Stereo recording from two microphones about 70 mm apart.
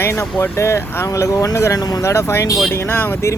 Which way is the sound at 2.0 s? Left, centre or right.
Left.